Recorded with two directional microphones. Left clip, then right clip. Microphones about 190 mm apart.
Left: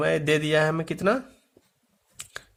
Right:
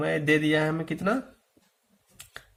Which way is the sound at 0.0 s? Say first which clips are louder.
Left 1 dB; 40° left (ahead or behind).